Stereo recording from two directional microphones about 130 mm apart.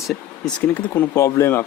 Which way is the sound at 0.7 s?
20° left (ahead or behind).